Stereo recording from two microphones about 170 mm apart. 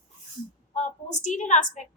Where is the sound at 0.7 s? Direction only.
45° left (ahead or behind).